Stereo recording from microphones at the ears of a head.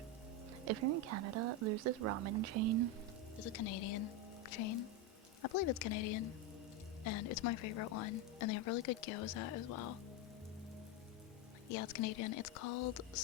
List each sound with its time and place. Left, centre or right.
0.6 s speech: right
3.4 s a woman's voice: left
11.7 s a woman's voice: left